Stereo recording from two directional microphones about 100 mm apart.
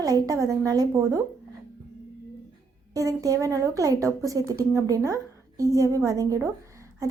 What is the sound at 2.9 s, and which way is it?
A woman's voice, 35° right (ahead or behind).